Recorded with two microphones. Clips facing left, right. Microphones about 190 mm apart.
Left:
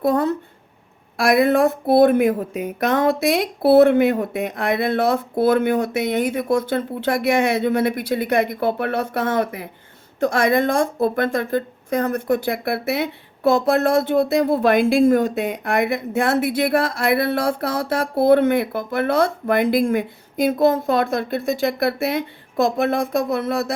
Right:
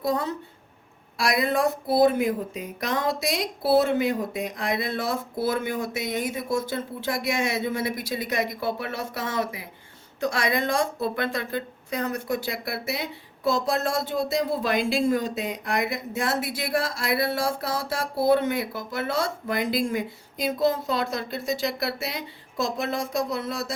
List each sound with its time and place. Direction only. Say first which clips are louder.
0.0 s a woman's voice: left 8 dB; 55° left (ahead or behind)